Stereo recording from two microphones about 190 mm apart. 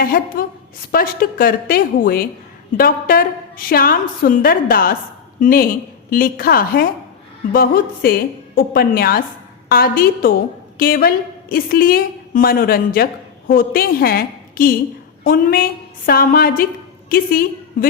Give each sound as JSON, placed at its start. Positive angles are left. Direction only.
{"t": 0.0, "sound": "a woman's voice", "side_deg": 50}